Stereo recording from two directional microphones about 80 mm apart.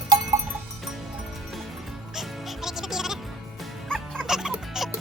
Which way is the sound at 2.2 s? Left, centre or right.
Centre.